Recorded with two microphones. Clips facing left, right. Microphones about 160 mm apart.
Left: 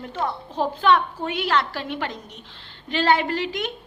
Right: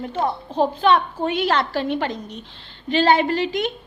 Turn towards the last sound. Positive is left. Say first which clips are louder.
# right 4 dB
turn(degrees=-25)  # may be behind; listen again after turning